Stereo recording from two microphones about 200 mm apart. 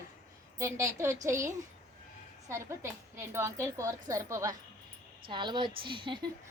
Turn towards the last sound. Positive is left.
turn(degrees=-25)  # may be behind; listen again after turning